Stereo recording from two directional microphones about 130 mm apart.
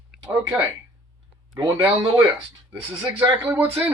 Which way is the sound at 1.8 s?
20° right (ahead or behind).